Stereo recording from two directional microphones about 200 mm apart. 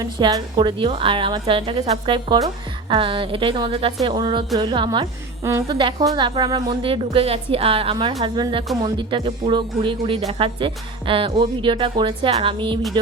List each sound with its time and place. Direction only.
0.0 s speech: 20° right (ahead or behind)